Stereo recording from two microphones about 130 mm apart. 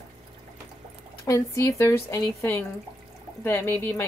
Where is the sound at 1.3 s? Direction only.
25° left (ahead or behind).